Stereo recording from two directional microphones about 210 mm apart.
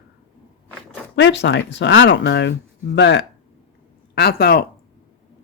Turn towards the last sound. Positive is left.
turn(degrees=45)  # may be behind; listen again after turning